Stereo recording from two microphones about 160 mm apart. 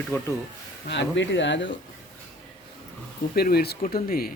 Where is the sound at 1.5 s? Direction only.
90° left.